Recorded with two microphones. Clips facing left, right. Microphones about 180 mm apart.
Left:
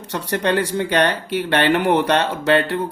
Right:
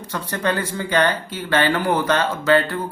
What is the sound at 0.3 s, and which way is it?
Speech, 70° left (ahead or behind).